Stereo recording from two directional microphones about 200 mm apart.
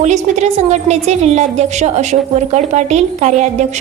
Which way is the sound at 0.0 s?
35° right (ahead or behind).